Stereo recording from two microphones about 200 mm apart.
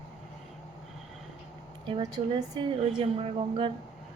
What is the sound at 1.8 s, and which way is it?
A woman's voice, 25° right (ahead or behind).